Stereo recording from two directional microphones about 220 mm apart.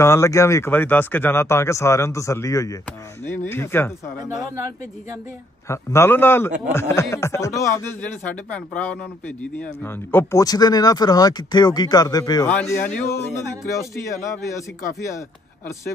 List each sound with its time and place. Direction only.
0.0 s speech: 10° left (ahead or behind)
5.7 s speech: 10° left (ahead or behind)